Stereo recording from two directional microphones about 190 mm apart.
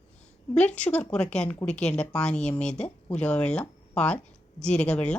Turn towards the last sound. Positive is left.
turn(degrees=5)  # may be behind; listen again after turning